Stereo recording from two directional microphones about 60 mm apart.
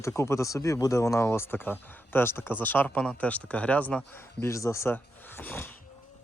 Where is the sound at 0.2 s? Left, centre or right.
Left.